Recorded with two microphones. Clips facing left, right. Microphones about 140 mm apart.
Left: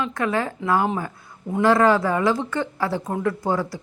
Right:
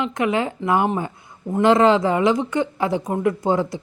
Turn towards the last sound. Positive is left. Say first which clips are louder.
# right 3 dB
turn(degrees=-20)  # may be behind; listen again after turning